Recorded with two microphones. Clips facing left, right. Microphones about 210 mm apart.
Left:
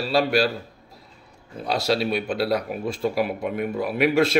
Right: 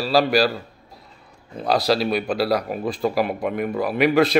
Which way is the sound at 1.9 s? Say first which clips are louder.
Right 2 dB; centre (ahead or behind).